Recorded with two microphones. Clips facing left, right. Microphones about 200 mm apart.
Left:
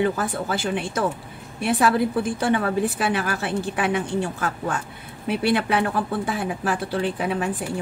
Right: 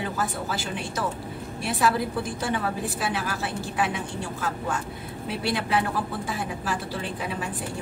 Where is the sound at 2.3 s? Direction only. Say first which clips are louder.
Left 7 dB; 60° left (ahead or behind).